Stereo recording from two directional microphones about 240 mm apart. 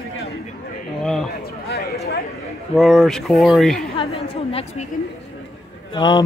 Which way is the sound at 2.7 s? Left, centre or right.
Centre.